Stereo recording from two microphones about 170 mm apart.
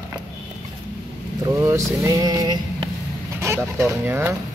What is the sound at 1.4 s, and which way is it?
Speech, 15° right (ahead or behind).